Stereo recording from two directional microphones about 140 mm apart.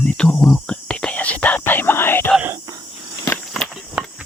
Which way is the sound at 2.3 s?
15° right (ahead or behind).